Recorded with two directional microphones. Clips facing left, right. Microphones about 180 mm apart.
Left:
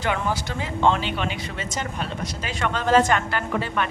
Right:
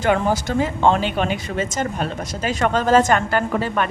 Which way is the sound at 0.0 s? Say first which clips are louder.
Right 6 dB; 45° right (ahead or behind).